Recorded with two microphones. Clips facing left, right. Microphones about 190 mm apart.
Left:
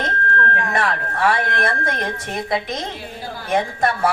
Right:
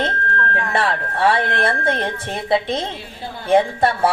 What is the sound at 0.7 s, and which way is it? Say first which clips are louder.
A woman's voice: right 1 dB; 30° right (ahead or behind).